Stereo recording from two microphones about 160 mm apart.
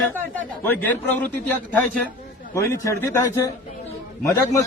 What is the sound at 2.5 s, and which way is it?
A man's voice, 20° left (ahead or behind).